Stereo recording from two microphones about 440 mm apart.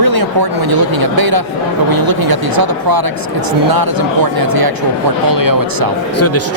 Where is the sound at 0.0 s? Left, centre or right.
Right.